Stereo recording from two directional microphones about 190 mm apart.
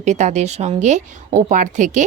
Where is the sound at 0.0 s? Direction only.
40° right (ahead or behind).